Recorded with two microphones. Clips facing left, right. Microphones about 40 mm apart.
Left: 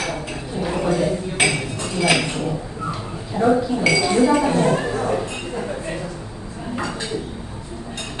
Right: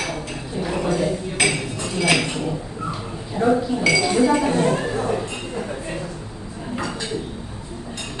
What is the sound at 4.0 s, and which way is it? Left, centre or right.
Speech, centre.